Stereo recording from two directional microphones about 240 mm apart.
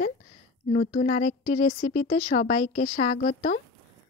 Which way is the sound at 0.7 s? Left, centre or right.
Left.